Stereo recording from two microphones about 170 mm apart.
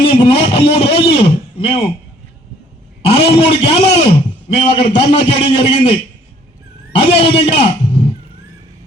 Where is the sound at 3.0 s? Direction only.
35° left (ahead or behind).